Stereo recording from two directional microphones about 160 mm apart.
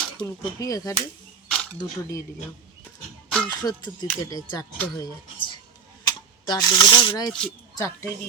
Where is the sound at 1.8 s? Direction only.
20° left (ahead or behind).